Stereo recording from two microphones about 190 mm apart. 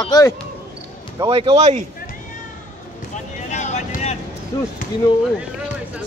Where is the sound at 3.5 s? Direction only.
40° left (ahead or behind).